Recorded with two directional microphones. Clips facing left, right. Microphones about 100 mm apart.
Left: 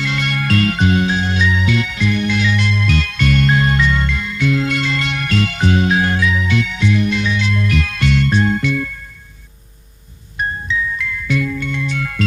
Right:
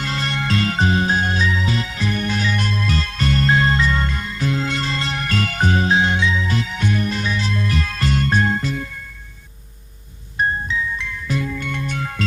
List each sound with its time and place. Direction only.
0.0 s music: 35° right (ahead or behind)
6.0 s music: 25° right (ahead or behind); by 8.7 s 40° right (ahead or behind)
10.3 s music: 35° right (ahead or behind)
11.6 s music: 50° right (ahead or behind)
11.9 s music: 30° right (ahead or behind)